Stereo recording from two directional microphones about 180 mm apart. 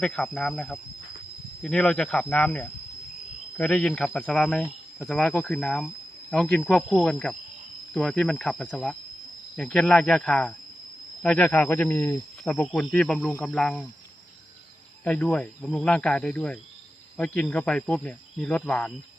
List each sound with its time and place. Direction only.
0.0 s speech: 5° left (ahead or behind)
15.0 s speech: 5° left (ahead or behind)